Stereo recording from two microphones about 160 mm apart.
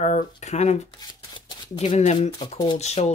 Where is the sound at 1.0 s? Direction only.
25° left (ahead or behind).